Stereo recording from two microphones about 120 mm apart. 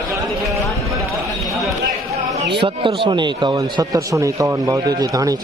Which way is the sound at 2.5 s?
45° right (ahead or behind).